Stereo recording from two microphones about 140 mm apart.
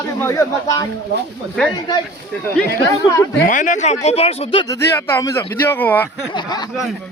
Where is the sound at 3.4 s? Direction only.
65° left (ahead or behind); by 4.6 s 45° left (ahead or behind).